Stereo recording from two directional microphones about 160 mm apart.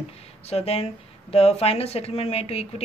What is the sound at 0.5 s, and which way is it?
Speech, 40° left (ahead or behind).